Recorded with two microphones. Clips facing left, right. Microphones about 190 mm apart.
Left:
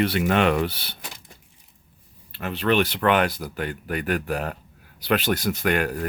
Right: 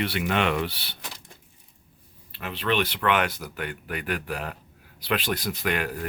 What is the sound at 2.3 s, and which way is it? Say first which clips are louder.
Speech: left 5 dB; 45° left (ahead or behind).